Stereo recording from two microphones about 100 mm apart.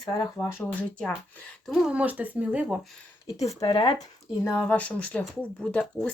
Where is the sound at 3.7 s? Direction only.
60° left (ahead or behind).